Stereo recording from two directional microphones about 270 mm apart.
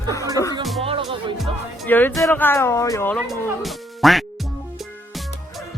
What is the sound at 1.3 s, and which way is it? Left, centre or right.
Speech, centre.